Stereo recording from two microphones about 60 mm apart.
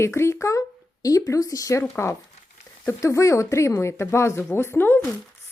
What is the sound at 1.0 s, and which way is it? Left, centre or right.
Speech, left.